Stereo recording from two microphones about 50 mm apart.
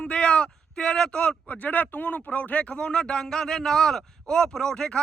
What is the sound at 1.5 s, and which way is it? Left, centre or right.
A man's voice, left.